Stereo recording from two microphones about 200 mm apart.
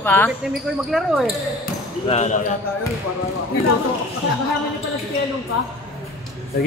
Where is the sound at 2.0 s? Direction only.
30° left (ahead or behind).